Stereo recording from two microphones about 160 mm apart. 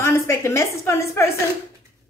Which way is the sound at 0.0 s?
15° left (ahead or behind).